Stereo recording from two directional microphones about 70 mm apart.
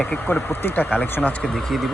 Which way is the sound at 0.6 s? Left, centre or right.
Left.